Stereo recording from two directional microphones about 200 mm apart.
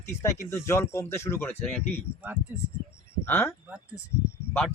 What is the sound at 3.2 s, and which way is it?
Speech, 10° left (ahead or behind).